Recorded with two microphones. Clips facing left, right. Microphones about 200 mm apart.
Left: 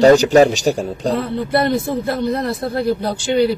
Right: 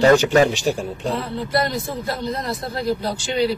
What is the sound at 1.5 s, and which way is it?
A man's voice, 60° left (ahead or behind).